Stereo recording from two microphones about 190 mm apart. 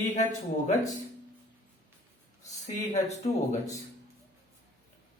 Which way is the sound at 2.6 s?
35° left (ahead or behind).